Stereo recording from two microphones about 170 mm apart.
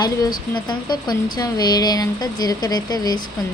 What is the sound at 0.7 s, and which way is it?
A woman's voice, 25° left (ahead or behind).